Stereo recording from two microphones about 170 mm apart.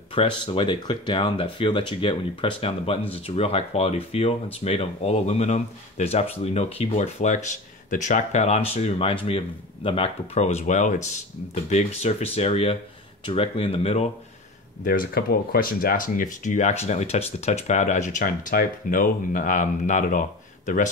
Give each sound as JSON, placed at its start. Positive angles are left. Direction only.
{"t": 0.1, "sound": "speech", "side_deg": 30}
{"t": 14.9, "sound": "speech", "side_deg": 60}